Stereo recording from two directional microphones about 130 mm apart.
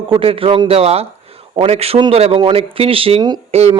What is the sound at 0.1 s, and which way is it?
A man's voice, 45° right (ahead or behind).